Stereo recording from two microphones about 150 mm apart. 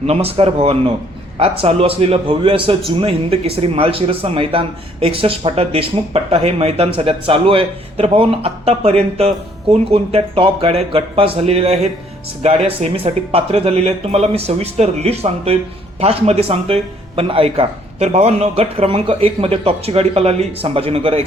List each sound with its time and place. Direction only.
0.1 s a man's voice: 40° right (ahead or behind)